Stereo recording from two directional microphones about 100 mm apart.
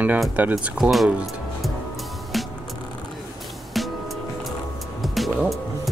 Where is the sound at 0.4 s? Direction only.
15° right (ahead or behind).